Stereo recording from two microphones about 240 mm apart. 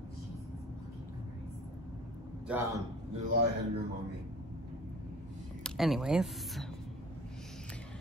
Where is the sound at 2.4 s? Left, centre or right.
Centre.